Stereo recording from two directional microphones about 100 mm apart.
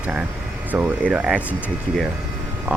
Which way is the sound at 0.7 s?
15° right (ahead or behind).